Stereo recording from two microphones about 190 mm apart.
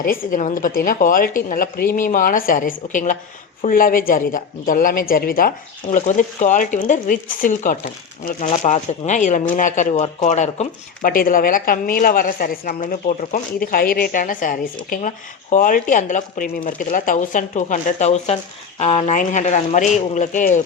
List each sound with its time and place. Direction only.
0.0 s speech: 50° left (ahead or behind)